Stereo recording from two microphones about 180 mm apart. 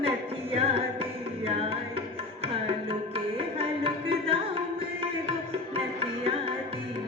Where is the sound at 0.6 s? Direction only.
30° right (ahead or behind).